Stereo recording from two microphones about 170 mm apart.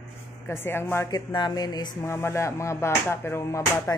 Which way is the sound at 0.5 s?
15° left (ahead or behind).